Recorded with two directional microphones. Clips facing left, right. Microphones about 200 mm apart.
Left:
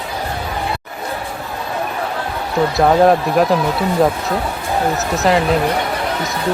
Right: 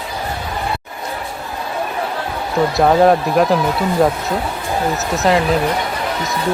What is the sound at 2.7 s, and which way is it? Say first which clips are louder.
Speech: even; centre (ahead or behind).